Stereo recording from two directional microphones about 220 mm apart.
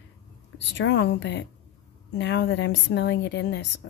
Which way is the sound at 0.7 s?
50° left (ahead or behind).